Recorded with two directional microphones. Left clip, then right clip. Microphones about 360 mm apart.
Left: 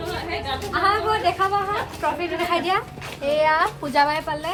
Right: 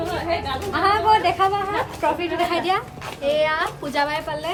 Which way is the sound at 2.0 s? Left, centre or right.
Centre.